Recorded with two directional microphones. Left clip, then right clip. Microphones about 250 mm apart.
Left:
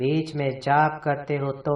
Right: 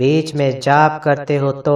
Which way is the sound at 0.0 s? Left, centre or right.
Right.